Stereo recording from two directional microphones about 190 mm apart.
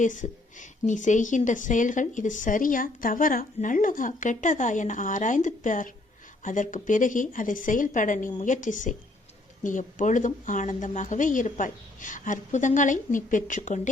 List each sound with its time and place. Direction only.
0.0 s a woman's voice: 40° left (ahead or behind)